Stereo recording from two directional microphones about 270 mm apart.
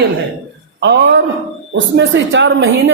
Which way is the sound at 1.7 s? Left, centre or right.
Right.